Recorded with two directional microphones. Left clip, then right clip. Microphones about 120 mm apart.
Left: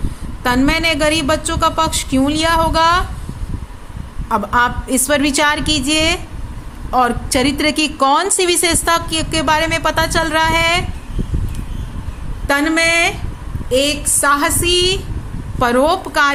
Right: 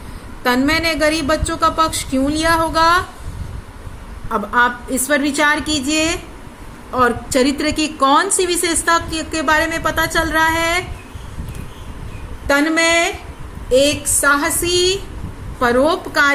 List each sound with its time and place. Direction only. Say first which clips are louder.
0.4 s a woman's voice: left 1 dB; 60° left (ahead or behind)
4.3 s a woman's voice: left 1 dB; 60° left (ahead or behind)
12.5 s speech: even; 45° left (ahead or behind)
13.7 s a woman's voice: right 2 dB; 55° left (ahead or behind)
15.6 s a woman's voice: left 1 dB; 90° left